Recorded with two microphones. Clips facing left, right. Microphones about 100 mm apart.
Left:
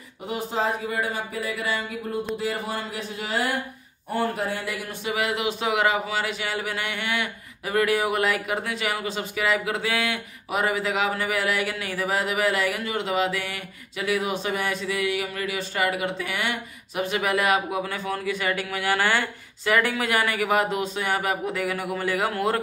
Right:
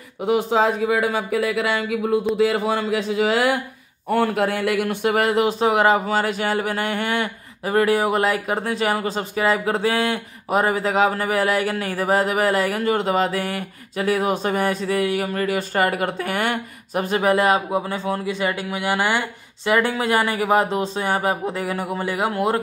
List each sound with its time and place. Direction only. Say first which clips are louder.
0.3 s speech: right 8 dB; 90° right; by 22.6 s 20° right (ahead or behind)